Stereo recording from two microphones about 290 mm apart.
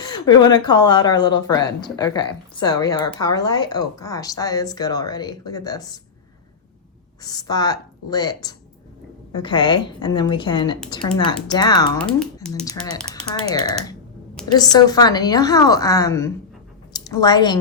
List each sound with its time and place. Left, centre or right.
0.0 s speech: centre
7.2 s speech: centre
11.9 s speech: centre
12.6 s a woman's voice: centre